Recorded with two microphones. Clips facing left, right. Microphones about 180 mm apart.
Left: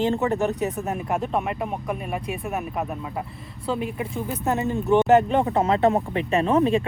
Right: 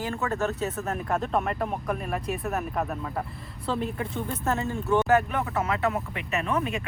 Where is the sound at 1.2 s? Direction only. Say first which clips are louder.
Left 1 dB; centre (ahead or behind).